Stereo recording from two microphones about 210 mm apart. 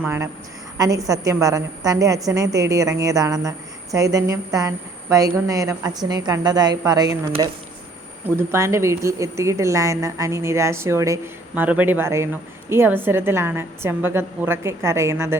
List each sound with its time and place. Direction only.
0.0 s a woman's voice: 10° right (ahead or behind)